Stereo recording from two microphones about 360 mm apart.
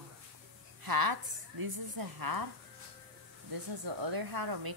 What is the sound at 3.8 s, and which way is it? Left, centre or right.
Speech, right.